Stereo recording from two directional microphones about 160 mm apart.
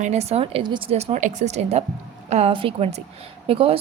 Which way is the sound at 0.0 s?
45° right (ahead or behind).